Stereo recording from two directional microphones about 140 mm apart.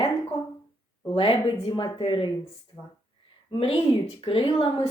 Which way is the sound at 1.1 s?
40° left (ahead or behind).